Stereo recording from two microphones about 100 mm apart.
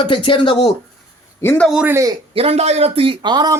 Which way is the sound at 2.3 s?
75° right (ahead or behind).